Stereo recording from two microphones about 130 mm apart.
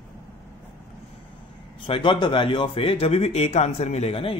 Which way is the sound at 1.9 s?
40° left (ahead or behind).